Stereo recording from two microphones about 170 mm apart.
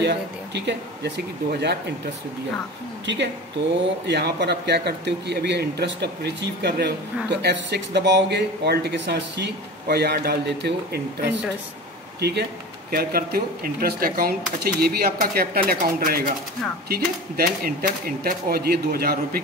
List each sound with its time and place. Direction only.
0.6 s speech: 90° right; by 2.0 s 75° right (ahead or behind)
3.1 s speech: 90° right; by 12.4 s 75° right (ahead or behind)
12.9 s speech: 60° right (ahead or behind)